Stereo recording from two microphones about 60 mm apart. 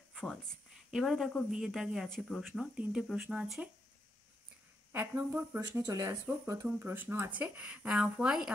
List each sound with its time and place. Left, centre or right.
0.1 s a sound: centre
0.9 s speech: centre
2.6 s a woman's voice: centre
4.9 s speech: right
5.8 s speech: right
6.4 s speech: right
7.2 s speech: right
7.9 s a woman's voice: centre